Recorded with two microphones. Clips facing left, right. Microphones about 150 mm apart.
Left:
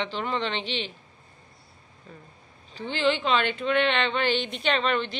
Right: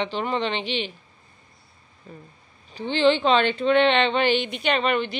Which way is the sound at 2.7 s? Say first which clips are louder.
Right 5 dB; 20° right (ahead or behind).